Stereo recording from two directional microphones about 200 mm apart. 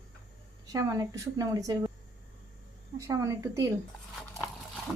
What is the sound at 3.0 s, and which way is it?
Speech, 15° right (ahead or behind).